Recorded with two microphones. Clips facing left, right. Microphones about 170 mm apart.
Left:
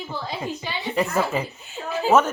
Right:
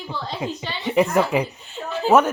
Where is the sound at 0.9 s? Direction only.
20° right (ahead or behind).